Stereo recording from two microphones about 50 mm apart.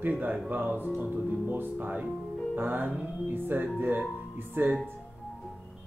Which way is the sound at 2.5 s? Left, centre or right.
Right.